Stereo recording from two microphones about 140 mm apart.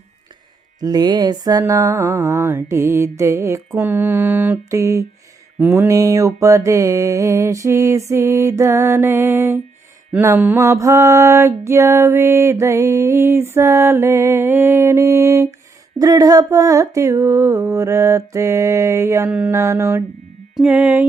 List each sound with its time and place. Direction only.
0.8 s mantra: 30° right (ahead or behind); by 4.6 s 15° right (ahead or behind)
4.7 s mantra: 25° right (ahead or behind)
19.3 s music: 10° right (ahead or behind)
19.5 s mantra: 20° right (ahead or behind)
20.6 s music: 10° right (ahead or behind)